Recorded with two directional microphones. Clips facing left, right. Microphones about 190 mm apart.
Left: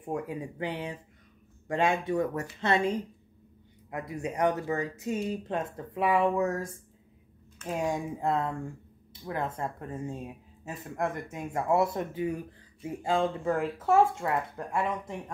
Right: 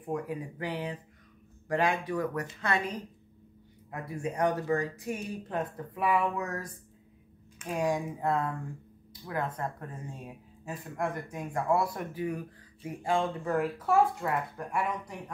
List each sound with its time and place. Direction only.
0.1 s speech: 25° left (ahead or behind)
7.7 s speech: 25° left (ahead or behind)